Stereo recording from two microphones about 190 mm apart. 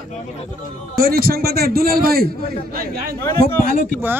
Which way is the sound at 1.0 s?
55° right (ahead or behind).